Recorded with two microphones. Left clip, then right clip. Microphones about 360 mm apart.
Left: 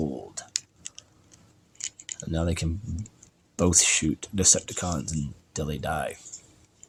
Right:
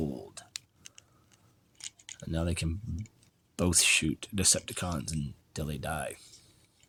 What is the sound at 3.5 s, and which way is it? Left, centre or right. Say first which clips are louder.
Speech: left 3 dB; right.